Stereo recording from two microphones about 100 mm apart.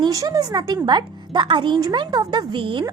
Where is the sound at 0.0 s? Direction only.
40° right (ahead or behind); by 2.8 s 55° right (ahead or behind).